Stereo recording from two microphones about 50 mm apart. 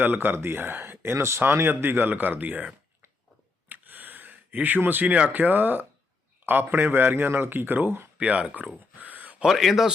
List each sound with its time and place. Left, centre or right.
0.0 s a man's voice: right
1.1 s a man's voice: right
3.7 s a sound: right
4.8 s speech: right
5.0 s speech: right
5.3 s a man's voice: right
8.2 s speech: right
9.0 s a sound: right
9.5 s speech: centre